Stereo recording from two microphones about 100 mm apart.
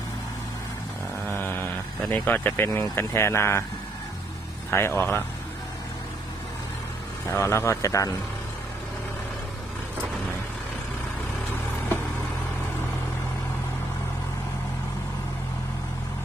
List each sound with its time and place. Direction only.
1.3 s speech: 20° left (ahead or behind)
4.7 s speech: 25° left (ahead or behind)
7.3 s speech: 30° left (ahead or behind)